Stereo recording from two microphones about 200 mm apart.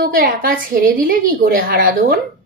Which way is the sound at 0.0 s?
45° right (ahead or behind).